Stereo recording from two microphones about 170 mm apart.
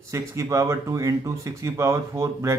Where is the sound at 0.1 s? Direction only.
20° right (ahead or behind).